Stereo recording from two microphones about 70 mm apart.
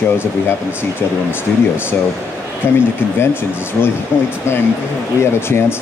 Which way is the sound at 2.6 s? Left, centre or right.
Left.